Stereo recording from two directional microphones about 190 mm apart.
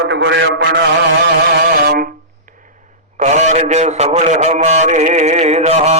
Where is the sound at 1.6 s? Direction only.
55° right (ahead or behind).